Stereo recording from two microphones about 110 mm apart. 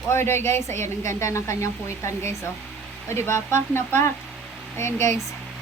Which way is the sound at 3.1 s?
25° left (ahead or behind).